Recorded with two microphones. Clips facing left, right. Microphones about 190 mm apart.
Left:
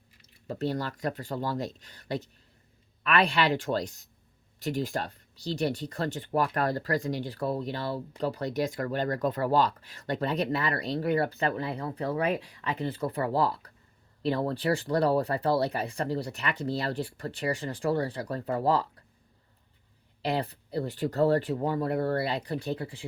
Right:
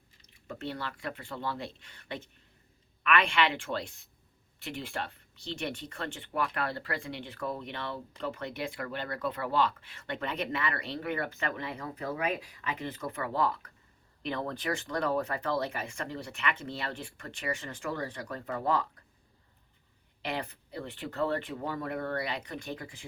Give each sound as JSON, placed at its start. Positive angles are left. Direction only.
{"t": 0.3, "sound": "speech", "side_deg": 35}
{"t": 20.2, "sound": "speech", "side_deg": 35}